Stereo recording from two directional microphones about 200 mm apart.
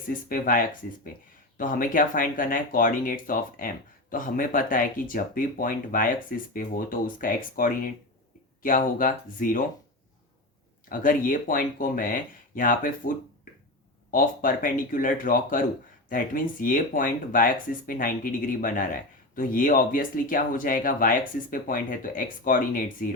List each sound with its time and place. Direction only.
0.1 s speech: 45° left (ahead or behind)
10.8 s speech: 45° left (ahead or behind)